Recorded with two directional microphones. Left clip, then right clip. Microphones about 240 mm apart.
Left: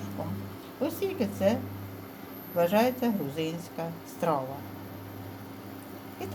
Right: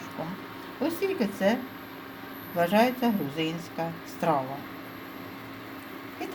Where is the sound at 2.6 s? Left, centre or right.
Centre.